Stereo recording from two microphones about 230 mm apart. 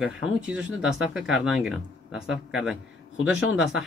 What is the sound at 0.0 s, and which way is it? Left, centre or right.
Speech, centre.